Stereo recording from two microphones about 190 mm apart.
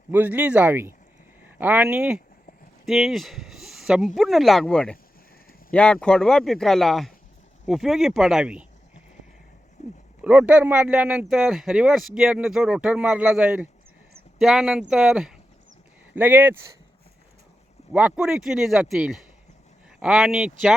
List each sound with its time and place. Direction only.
0.1 s speech: 10° right (ahead or behind)
9.8 s speech: 35° left (ahead or behind)
10.2 s speech: 5° right (ahead or behind)
17.9 s speech: 5° right (ahead or behind)